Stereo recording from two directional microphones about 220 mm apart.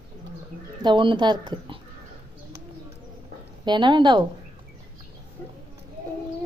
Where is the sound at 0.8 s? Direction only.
20° right (ahead or behind).